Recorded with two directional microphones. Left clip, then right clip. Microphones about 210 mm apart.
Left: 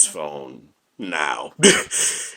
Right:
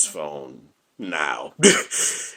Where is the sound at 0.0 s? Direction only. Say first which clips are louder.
Left 3 dB; 10° left (ahead or behind).